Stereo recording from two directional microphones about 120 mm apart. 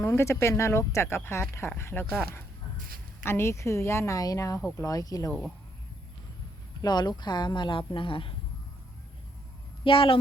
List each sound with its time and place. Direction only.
0.0 s speech: 20° left (ahead or behind)
3.2 s speech: 20° left (ahead or behind)
6.8 s speech: 35° left (ahead or behind)
9.8 s a woman's voice: 45° left (ahead or behind)